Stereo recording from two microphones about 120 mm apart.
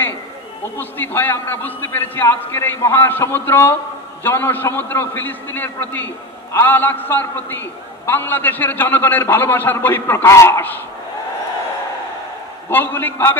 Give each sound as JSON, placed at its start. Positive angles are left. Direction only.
{"t": 0.7, "sound": "a man's voice", "side_deg": 15}
{"t": 12.6, "sound": "a man's voice", "side_deg": 15}